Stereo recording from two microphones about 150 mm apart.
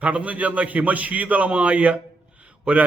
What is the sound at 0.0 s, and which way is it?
A man's voice, 10° right (ahead or behind).